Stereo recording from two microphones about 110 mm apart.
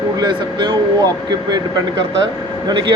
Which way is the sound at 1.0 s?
40° right (ahead or behind).